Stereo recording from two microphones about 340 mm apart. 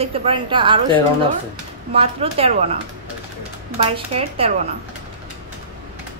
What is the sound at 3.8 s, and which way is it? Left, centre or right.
Speech, centre.